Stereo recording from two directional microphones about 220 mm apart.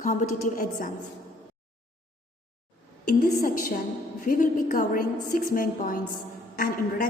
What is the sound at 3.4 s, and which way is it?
A woman's voice, 35° left (ahead or behind).